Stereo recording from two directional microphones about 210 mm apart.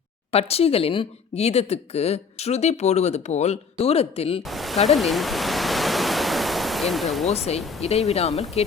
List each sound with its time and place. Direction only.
0.3 s speech: 30° left (ahead or behind)
4.4 s speech: centre (ahead or behind)
4.9 s pink noise: centre (ahead or behind)
7.3 s speech: 30° left (ahead or behind)